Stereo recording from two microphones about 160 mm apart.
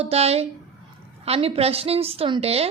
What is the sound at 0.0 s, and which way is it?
A woman's voice, 40° right (ahead or behind).